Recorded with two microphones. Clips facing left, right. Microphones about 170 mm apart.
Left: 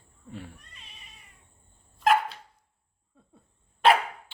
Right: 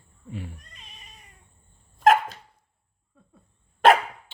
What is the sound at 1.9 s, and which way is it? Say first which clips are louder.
Dog: right 4 dB; 45° right (ahead or behind).